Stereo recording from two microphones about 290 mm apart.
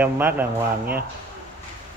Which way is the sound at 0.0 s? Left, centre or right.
Centre.